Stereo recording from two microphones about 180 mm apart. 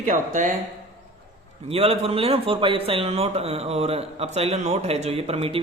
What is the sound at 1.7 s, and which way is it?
A man's voice, 35° right (ahead or behind).